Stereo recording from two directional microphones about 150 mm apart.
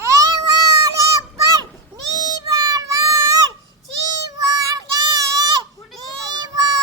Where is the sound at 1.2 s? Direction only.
25° right (ahead or behind).